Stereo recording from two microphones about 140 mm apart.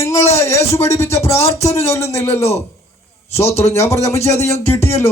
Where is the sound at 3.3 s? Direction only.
20° left (ahead or behind).